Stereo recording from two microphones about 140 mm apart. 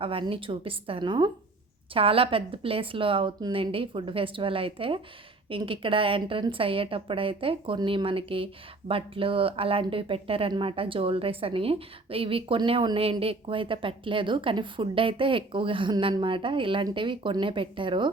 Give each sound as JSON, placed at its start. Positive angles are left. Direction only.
{"t": 0.0, "sound": "speech", "side_deg": -40}